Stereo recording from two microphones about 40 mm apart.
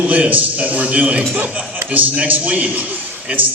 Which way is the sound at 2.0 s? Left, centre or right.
Right.